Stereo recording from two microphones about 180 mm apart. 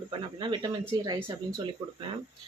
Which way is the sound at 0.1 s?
25° right (ahead or behind).